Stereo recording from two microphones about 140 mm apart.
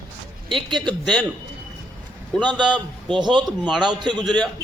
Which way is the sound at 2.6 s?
35° right (ahead or behind).